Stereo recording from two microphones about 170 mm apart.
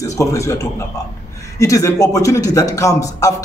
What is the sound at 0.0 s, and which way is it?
A man's voice, 20° left (ahead or behind).